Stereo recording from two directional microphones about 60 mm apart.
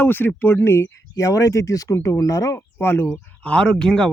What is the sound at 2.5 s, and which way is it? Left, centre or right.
Speech, left.